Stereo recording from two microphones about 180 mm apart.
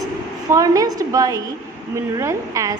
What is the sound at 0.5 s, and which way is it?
A woman's voice, 20° right (ahead or behind).